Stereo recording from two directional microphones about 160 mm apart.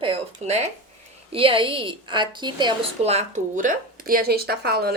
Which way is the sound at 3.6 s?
60° right (ahead or behind).